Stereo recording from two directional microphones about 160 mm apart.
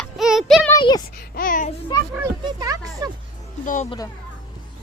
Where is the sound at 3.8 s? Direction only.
25° left (ahead or behind).